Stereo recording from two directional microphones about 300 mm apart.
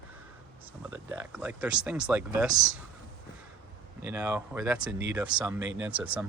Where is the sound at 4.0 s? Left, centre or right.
Centre.